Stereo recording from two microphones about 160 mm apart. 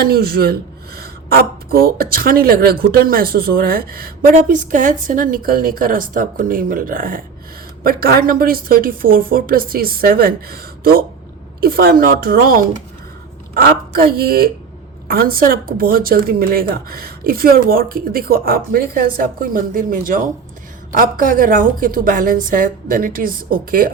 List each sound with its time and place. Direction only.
0.0 s a woman's voice: 70° right (ahead or behind)